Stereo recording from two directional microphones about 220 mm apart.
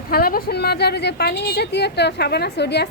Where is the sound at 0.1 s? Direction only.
45° left (ahead or behind).